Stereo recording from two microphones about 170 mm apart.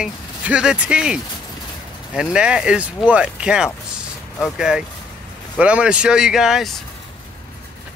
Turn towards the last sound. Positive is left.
turn(degrees=0)  # may be behind; listen again after turning